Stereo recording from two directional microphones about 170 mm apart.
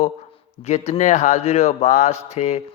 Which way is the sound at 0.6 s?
40° left (ahead or behind).